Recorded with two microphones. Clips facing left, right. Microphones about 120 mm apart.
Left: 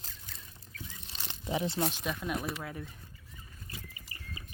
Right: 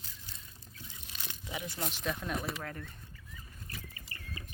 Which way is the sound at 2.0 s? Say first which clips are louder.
Left 1 dB; 10° left (ahead or behind).